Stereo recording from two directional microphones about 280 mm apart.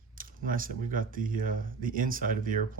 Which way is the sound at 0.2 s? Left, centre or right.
Right.